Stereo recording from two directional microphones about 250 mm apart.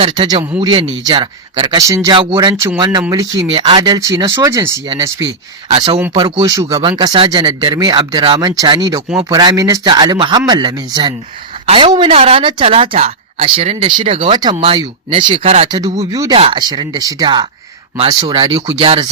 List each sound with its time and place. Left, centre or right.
0.0 s speech: right